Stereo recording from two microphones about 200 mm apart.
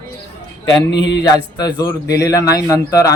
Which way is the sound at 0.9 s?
60° left (ahead or behind).